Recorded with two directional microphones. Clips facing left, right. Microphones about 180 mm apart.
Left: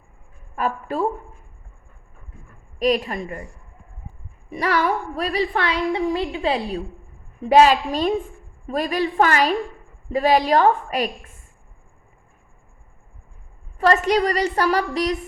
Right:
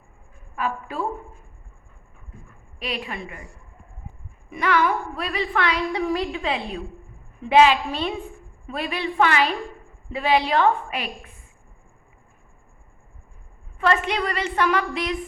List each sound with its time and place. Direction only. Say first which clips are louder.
0.5 s a sound: left 4 dB; 40° left (ahead or behind)
2.7 s speech: left 10 dB; 40° left (ahead or behind)
4.4 s speech: even; 35° left (ahead or behind)
13.7 s speech: left 5 dB; 40° left (ahead or behind)